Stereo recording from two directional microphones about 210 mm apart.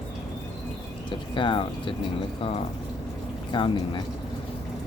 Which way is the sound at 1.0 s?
25° left (ahead or behind).